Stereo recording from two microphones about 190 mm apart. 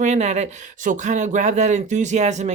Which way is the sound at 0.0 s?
35° right (ahead or behind).